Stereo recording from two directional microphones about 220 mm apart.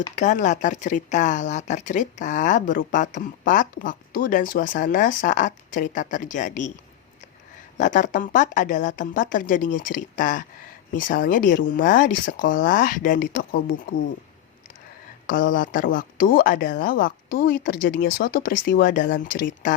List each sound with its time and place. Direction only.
0.2 s speech: 35° left (ahead or behind)
7.8 s speech: 35° left (ahead or behind)
15.3 s speech: 40° left (ahead or behind)